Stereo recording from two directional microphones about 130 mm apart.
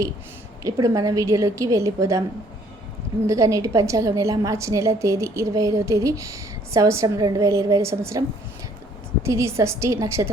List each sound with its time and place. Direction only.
0.6 s a woman's voice: 25° right (ahead or behind)
3.2 s a woman's voice: 25° right (ahead or behind)
9.2 s a woman's voice: 20° right (ahead or behind)